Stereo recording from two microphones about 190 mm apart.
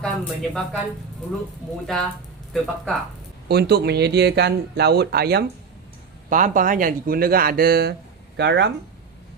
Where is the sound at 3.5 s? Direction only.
60° right (ahead or behind).